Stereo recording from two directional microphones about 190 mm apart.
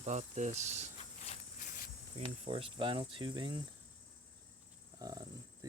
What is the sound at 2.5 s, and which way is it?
Speech, 25° right (ahead or behind).